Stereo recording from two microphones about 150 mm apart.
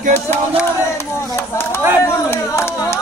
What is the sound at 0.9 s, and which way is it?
Speech, 15° left (ahead or behind).